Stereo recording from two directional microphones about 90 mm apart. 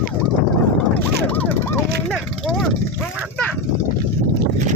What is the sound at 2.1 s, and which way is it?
Vehicle, 5° left (ahead or behind).